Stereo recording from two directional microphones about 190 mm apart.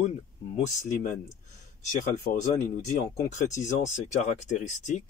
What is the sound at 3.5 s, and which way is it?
Speech, 35° left (ahead or behind).